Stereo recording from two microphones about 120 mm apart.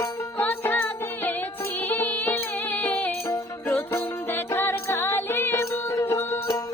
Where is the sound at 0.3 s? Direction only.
15° left (ahead or behind).